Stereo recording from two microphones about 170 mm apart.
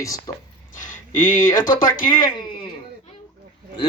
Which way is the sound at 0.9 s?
50° left (ahead or behind).